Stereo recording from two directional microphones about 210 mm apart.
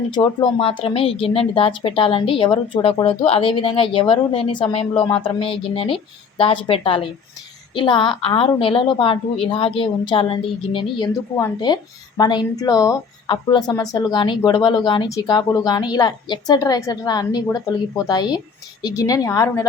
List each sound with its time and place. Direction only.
0.1 s a woman's voice: 20° left (ahead or behind)